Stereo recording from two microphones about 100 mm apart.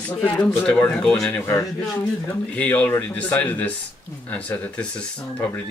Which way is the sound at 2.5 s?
15° left (ahead or behind).